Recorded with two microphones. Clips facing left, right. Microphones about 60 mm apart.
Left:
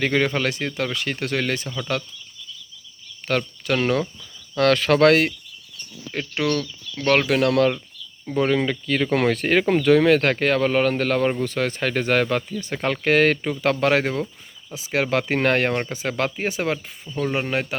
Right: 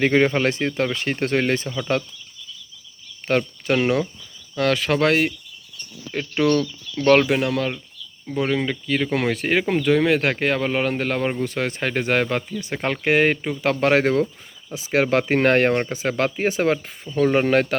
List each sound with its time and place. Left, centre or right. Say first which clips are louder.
0.0 s speech: right 3 dB; right
1.6 s speech: right 2 dB; centre
3.2 s speech: right 2 dB; right
4.5 s speech: left 3 dB; centre
7.3 s speech: left 2 dB; centre
7.5 s speech: left 5 dB; centre
13.8 s speech: right 5 dB; right
14.7 s speech: right 3 dB; right
17.5 s speech: right 6 dB; right